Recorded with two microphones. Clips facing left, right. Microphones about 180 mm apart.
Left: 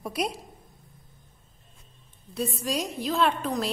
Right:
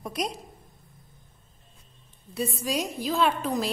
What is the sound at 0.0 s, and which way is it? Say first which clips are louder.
Speech: left 1 dB; 5° left (ahead or behind).